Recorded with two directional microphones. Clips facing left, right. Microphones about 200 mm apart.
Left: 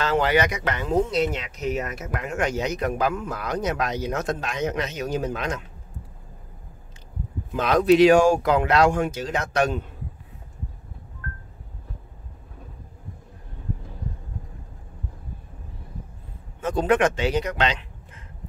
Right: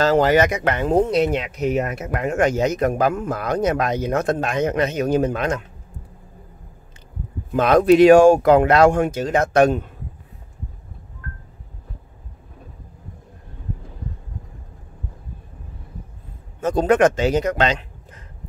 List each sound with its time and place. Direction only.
0.0 s speech: 40° right (ahead or behind)
7.5 s speech: 55° right (ahead or behind)
16.6 s a man's voice: 40° right (ahead or behind)